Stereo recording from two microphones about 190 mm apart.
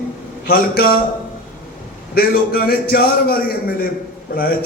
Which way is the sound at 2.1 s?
50° left (ahead or behind).